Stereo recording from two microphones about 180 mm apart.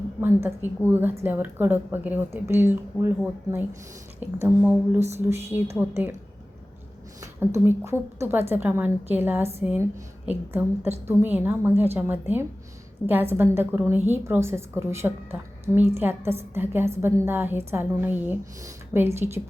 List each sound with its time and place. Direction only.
0.2 s a woman's voice: 15° right (ahead or behind)
4.2 s a woman's voice: 10° right (ahead or behind)
4.9 s a sound: 40° right (ahead or behind)
5.2 s a woman's voice: 10° right (ahead or behind)
7.2 s a woman's voice: 15° right (ahead or behind)
10.9 s a woman's voice: 10° right (ahead or behind)